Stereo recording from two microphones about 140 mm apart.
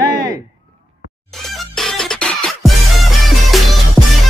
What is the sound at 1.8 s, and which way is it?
Music, 5° left (ahead or behind).